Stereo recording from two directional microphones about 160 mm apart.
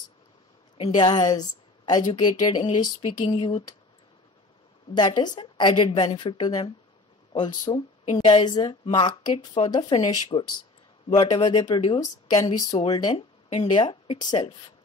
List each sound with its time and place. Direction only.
0.8 s speech: 25° left (ahead or behind)
4.9 s speech: 25° left (ahead or behind)